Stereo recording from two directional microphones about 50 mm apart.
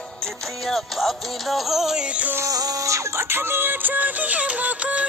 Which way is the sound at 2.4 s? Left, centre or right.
Right.